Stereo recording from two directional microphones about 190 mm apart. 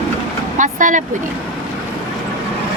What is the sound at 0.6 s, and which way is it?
Speech, 40° right (ahead or behind).